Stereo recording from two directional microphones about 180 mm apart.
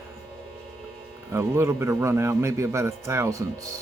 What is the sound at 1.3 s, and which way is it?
A man's voice, 15° right (ahead or behind).